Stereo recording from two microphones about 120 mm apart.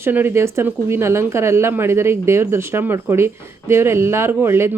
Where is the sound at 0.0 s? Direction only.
15° right (ahead or behind).